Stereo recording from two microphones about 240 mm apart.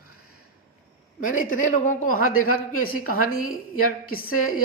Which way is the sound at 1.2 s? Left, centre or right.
Left.